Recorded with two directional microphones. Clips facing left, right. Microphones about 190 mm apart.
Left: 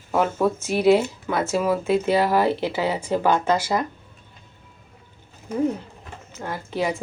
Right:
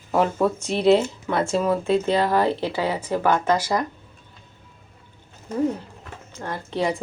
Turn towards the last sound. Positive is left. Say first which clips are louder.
# right 1 dB
turn(degrees=5)  # may be behind; listen again after turning